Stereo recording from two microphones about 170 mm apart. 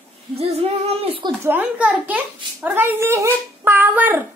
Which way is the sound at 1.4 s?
10° right (ahead or behind).